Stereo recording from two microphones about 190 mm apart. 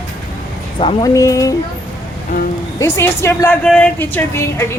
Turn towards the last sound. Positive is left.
turn(degrees=15)  # may be behind; listen again after turning